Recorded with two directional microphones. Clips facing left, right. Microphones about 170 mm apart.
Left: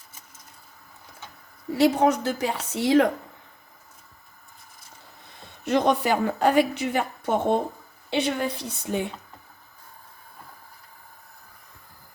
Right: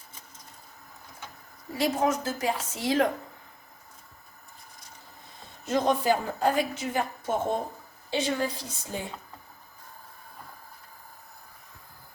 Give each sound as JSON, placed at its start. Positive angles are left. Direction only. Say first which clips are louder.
{"t": 1.7, "sound": "a woman's voice", "louder": "left 6 dB", "side_deg": 70}
{"t": 5.6, "sound": "a woman's voice", "louder": "left 2 dB", "side_deg": 70}